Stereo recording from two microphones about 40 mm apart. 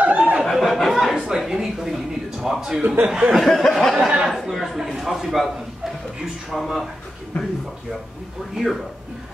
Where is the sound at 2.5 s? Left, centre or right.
Centre.